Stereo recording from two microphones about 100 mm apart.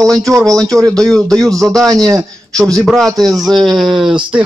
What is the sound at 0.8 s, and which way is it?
A man's voice, 5° left (ahead or behind).